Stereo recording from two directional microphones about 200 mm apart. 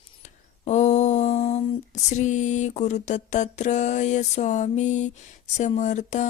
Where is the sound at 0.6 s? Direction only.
35° left (ahead or behind).